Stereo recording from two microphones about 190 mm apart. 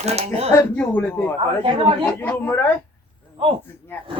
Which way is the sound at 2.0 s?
10° left (ahead or behind).